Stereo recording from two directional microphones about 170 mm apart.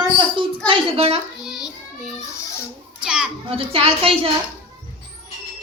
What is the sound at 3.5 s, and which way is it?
Speech, 35° right (ahead or behind).